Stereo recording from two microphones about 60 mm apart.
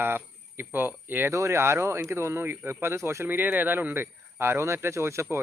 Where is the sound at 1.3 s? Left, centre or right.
Right.